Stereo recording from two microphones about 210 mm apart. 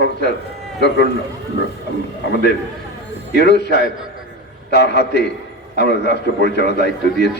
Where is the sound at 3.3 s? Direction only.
50° left (ahead or behind).